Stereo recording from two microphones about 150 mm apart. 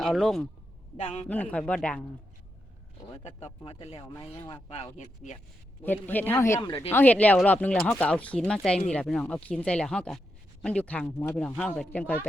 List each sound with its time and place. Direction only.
0.0 s speech: centre (ahead or behind)
0.9 s speech: 45° left (ahead or behind)
1.3 s speech: 10° left (ahead or behind)
3.2 s speech: 45° left (ahead or behind)
3.9 s speech: 20° left (ahead or behind)
4.9 s speech: 50° left (ahead or behind)
5.8 s speech: 10° left (ahead or behind)
6.6 s speech: 30° left (ahead or behind)
6.9 s speech: 10° left (ahead or behind)